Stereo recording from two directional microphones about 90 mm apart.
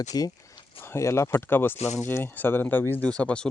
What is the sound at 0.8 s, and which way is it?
Speech, 30° left (ahead or behind).